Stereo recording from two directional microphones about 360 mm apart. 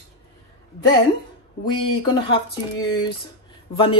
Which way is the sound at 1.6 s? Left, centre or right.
Centre.